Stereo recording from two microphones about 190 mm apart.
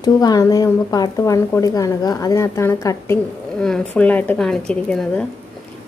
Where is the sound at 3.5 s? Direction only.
5° left (ahead or behind).